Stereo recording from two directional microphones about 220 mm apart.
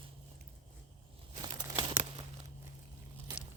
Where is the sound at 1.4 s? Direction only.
20° right (ahead or behind).